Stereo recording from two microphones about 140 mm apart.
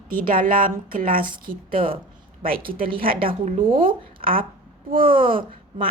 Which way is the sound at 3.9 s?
90° right.